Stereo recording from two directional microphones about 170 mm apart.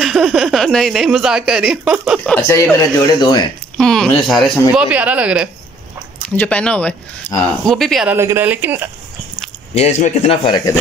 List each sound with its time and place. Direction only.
0.0 s speech: centre (ahead or behind)
2.3 s speech: 15° left (ahead or behind)
3.7 s speech: centre (ahead or behind)
6.4 s speech: 5° left (ahead or behind)
8.1 s speech: 15° right (ahead or behind)
9.8 s a man's voice: 40° left (ahead or behind)